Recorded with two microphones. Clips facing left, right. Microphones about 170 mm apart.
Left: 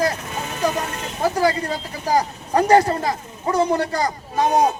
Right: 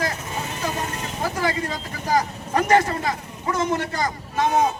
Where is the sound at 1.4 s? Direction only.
35° left (ahead or behind).